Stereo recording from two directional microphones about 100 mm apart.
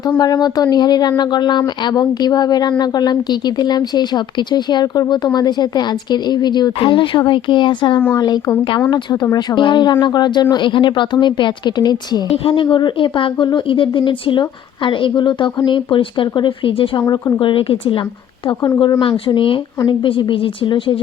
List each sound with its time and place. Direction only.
0.2 s speech: 45° left (ahead or behind)
8.1 s speech: 40° left (ahead or behind)
9.6 s speech: 50° left (ahead or behind)
12.5 s speech: 55° left (ahead or behind)
18.6 s speech: 50° left (ahead or behind)